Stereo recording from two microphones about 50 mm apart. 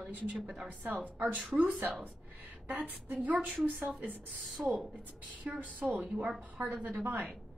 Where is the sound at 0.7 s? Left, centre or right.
Right.